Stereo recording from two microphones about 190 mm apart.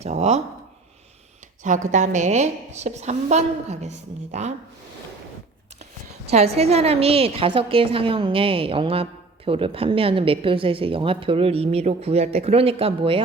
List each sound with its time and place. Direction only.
0.0 s a woman's voice: 35° right (ahead or behind)
1.6 s a woman's voice: 40° right (ahead or behind)
6.3 s a woman's voice: 35° right (ahead or behind)